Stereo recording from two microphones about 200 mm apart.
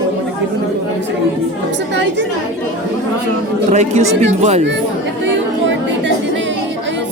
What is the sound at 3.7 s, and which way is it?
Speech, 35° right (ahead or behind).